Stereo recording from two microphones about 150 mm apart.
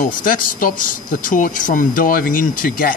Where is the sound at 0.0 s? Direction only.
65° left (ahead or behind).